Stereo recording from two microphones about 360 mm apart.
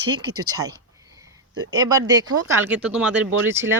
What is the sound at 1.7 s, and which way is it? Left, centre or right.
Speech, centre.